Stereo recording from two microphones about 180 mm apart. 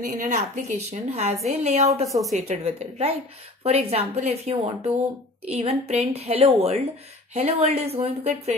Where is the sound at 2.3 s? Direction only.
40° right (ahead or behind).